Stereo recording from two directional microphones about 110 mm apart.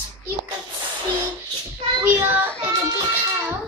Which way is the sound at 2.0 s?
15° right (ahead or behind).